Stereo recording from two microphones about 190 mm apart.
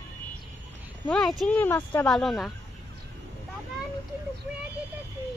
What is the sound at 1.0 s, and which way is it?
Speech, 5° left (ahead or behind).